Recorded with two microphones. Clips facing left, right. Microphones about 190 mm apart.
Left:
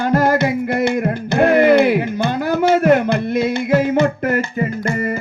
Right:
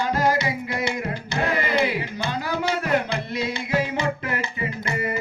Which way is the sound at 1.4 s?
55° left (ahead or behind).